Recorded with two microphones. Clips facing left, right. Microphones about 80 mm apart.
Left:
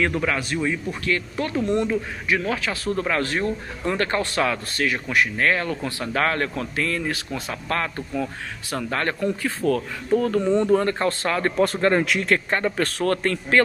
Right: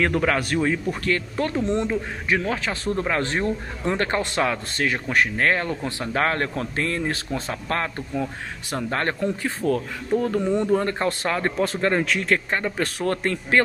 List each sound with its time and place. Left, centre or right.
0.0 s a man's voice: right; by 11.5 s centre
11.6 s speech: centre